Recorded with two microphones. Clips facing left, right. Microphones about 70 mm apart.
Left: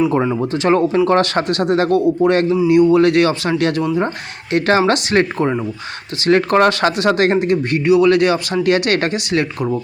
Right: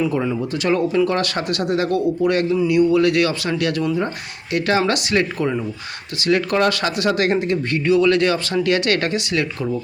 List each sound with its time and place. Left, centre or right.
0.1 s speech: left